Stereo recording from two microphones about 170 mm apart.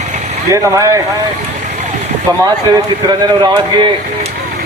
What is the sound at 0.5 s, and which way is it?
Speech, 20° right (ahead or behind).